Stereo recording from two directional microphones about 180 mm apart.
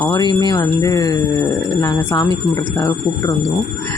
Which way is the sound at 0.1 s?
20° left (ahead or behind).